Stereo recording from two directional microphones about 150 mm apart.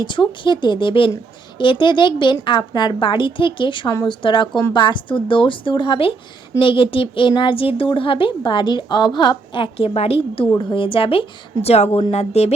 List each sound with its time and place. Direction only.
0.0 s speech: 30° left (ahead or behind)